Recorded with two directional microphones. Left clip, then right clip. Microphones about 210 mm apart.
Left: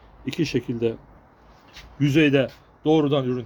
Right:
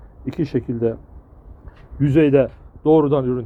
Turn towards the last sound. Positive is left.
turn(degrees=-5)  # may be behind; listen again after turning